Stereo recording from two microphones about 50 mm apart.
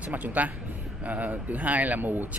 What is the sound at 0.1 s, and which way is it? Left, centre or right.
Speech, right.